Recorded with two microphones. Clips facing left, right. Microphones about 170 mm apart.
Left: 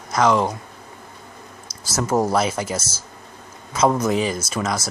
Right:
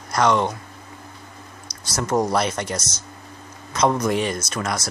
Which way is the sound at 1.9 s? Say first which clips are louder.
Left 1 dB; 5° left (ahead or behind).